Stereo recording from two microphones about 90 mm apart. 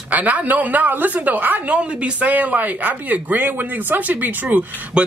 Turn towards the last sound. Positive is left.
turn(degrees=-20)  # may be behind; listen again after turning